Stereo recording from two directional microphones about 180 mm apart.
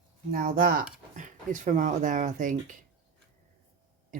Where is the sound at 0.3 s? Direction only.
55° right (ahead or behind).